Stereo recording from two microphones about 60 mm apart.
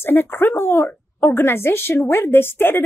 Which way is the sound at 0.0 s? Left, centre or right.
Left.